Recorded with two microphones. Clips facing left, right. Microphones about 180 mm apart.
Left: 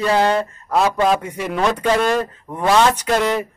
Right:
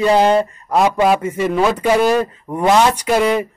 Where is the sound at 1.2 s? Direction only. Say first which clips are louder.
Right 4 dB; centre (ahead or behind).